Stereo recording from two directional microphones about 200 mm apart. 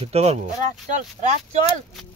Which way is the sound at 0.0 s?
30° right (ahead or behind).